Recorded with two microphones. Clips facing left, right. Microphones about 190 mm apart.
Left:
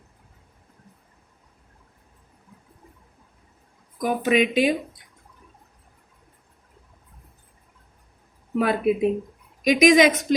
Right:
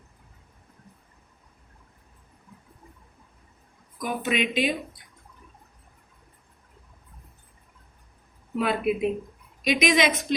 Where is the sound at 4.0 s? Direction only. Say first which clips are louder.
Left 6 dB; 40° left (ahead or behind).